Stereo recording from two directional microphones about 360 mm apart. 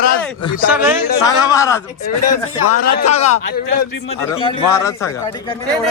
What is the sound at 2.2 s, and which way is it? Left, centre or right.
Speech, left.